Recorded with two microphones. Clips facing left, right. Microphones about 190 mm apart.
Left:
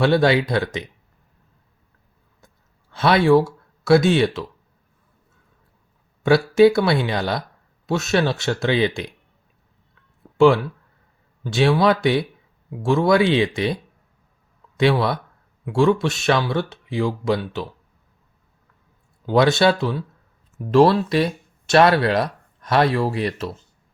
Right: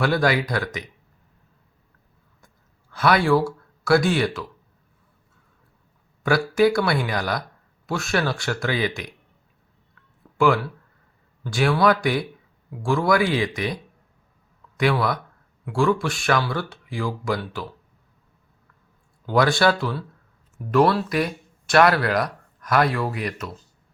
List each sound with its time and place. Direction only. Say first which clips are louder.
0.0 s speech: left 4 dB; 25° left (ahead or behind)
2.9 s speech: left 4 dB; 25° left (ahead or behind)
6.2 s speech: left 5 dB; 25° left (ahead or behind)
10.3 s speech: left 5 dB; 25° left (ahead or behind)
14.8 s speech: left 3 dB; 25° left (ahead or behind)
19.2 s speech: left 3 dB; 20° left (ahead or behind)